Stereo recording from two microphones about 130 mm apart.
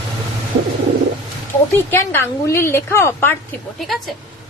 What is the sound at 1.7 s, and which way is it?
Speech, 15° left (ahead or behind).